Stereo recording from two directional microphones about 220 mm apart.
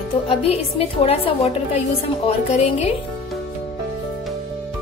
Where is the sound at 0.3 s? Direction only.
25° left (ahead or behind).